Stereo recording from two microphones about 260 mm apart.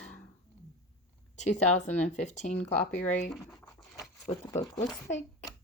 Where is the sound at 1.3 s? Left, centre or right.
Left.